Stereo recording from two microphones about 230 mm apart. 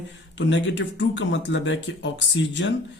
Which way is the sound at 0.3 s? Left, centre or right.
Left.